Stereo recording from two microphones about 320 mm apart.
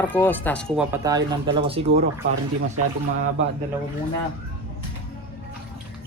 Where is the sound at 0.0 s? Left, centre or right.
Centre.